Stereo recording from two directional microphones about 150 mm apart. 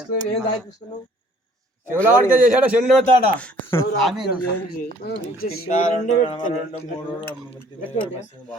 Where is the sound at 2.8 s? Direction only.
Centre (ahead or behind).